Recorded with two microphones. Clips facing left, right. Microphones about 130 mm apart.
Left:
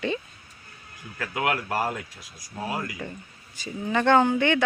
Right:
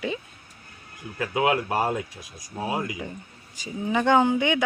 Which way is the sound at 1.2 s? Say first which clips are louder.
Right 4 dB; 20° right (ahead or behind).